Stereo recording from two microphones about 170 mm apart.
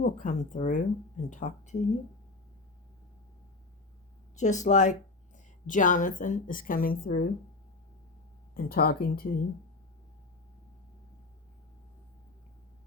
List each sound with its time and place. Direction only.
0.0 s speech: 50° left (ahead or behind)
4.4 s a woman's voice: 45° left (ahead or behind); by 7.3 s 60° left (ahead or behind)
8.5 s speech: 60° left (ahead or behind)